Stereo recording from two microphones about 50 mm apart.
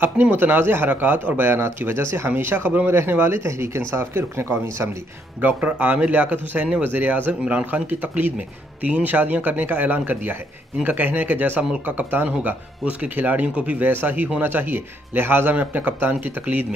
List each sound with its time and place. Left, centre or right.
0.0 s a man's voice: right
3.9 s speech: right
5.6 s speech: right
7.4 s speech: right
8.8 s a man's voice: right
15.5 s speech: right